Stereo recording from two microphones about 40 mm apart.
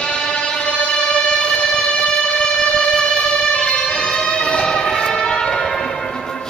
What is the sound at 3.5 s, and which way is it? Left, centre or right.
Music, left.